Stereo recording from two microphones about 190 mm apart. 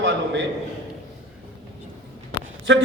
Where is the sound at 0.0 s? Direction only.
70° right (ahead or behind).